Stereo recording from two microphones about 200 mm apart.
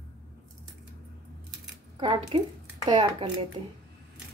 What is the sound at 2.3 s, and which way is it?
Speech, 30° right (ahead or behind).